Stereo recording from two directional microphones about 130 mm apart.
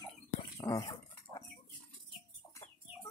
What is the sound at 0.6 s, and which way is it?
Dog, 25° left (ahead or behind).